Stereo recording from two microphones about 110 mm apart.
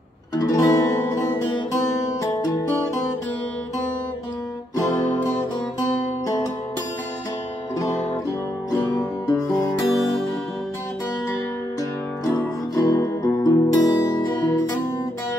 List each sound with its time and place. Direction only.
0.4 s music: 30° left (ahead or behind)
6.2 s music: 30° left (ahead or behind)
8.7 s music: 25° left (ahead or behind)
12.3 s music: 30° left (ahead or behind)